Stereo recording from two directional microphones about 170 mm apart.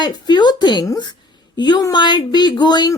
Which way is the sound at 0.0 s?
25° left (ahead or behind).